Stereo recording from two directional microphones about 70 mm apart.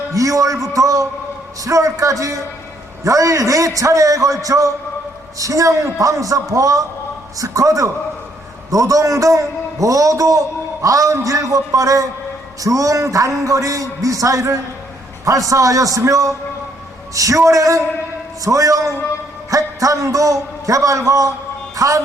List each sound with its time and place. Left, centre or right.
0.1 s a man's voice: right